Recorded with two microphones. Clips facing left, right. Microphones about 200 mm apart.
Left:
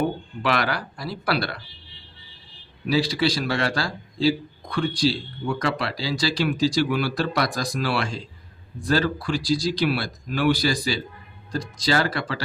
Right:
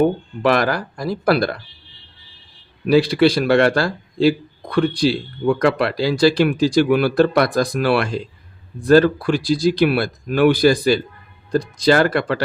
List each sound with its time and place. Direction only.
0.4 s speech: 45° right (ahead or behind)
2.8 s speech: 60° right (ahead or behind)